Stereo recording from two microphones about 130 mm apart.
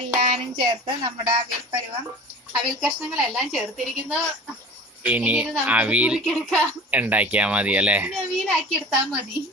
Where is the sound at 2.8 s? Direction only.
10° right (ahead or behind).